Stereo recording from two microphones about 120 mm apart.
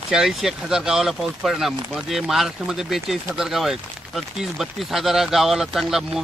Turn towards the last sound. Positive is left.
turn(degrees=-5)  # may be behind; listen again after turning